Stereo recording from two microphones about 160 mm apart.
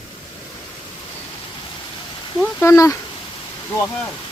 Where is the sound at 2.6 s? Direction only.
20° left (ahead or behind).